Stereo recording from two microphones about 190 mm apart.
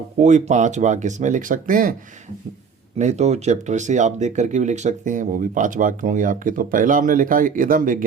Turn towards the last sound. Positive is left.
turn(degrees=-45)  # may be behind; listen again after turning